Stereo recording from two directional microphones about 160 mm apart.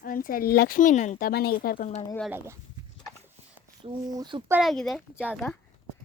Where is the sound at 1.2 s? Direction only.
70° left (ahead or behind).